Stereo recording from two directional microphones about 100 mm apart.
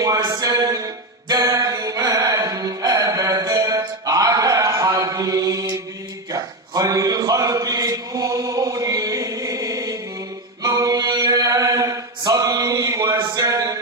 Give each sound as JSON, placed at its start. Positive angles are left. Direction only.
{"t": 0.0, "sound": "music", "side_deg": -35}
{"t": 6.3, "sound": "chant", "side_deg": -35}
{"t": 10.6, "sound": "mantra", "side_deg": -30}